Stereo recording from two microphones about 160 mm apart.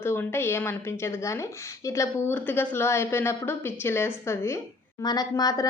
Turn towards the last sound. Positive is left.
turn(degrees=25)  # may be behind; listen again after turning